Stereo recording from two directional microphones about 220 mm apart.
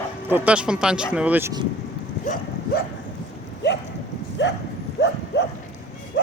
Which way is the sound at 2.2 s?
40° left (ahead or behind).